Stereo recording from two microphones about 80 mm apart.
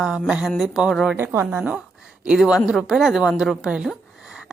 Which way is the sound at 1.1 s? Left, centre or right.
Right.